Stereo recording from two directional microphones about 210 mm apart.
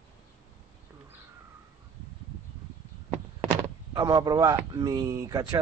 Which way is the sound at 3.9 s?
20° right (ahead or behind).